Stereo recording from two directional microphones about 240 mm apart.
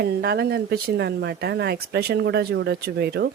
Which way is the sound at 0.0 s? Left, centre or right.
Right.